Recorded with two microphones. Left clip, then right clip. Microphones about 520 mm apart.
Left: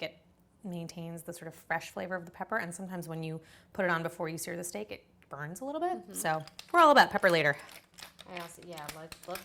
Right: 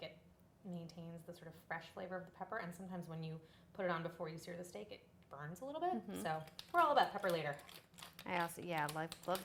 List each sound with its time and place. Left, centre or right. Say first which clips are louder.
0.7 s a woman's voice: left 10 dB; left
8.3 s speech: right 4 dB; right